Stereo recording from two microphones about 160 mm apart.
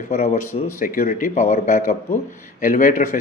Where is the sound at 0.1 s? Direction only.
45° left (ahead or behind).